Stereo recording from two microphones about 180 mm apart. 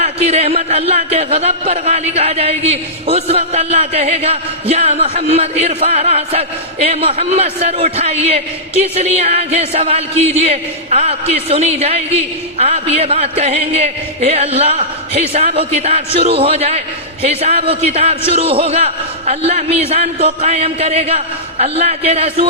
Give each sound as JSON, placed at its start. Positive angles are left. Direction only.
{"t": 0.0, "sound": "speech", "side_deg": -35}